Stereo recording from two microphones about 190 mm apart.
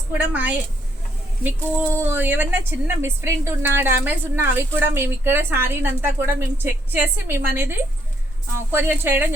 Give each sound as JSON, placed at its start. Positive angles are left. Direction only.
{"t": 0.2, "sound": "a woman's voice", "side_deg": -10}
{"t": 2.0, "sound": "a woman's voice", "side_deg": -10}